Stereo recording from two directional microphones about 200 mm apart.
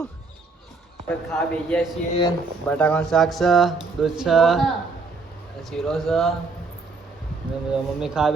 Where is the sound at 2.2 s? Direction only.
20° left (ahead or behind).